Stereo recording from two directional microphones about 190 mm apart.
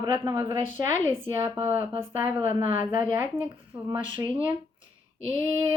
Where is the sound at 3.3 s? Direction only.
10° right (ahead or behind).